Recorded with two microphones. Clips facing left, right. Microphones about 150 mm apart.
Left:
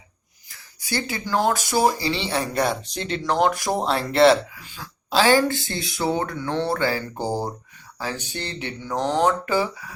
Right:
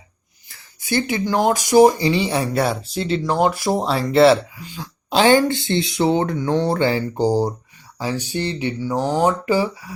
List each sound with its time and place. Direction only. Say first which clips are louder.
0.8 s speech: right 7 dB; 25° right (ahead or behind)
2.5 s speech: right 3 dB; 5° right (ahead or behind)
4.7 s speech: right 3 dB; 20° right (ahead or behind)